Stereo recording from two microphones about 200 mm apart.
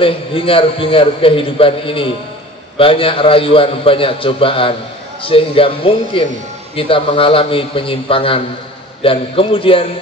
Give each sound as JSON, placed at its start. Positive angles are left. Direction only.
{"t": 0.0, "sound": "a man's voice", "side_deg": 25}